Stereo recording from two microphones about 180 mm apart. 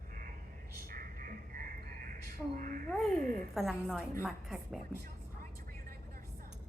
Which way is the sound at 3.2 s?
50° right (ahead or behind).